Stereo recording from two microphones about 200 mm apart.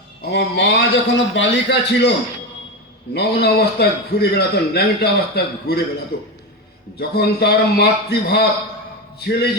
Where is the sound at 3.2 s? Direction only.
55° left (ahead or behind).